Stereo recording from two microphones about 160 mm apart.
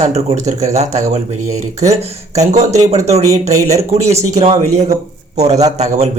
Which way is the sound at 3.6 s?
20° right (ahead or behind).